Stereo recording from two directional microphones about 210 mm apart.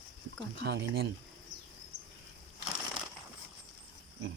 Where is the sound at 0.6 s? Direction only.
50° right (ahead or behind).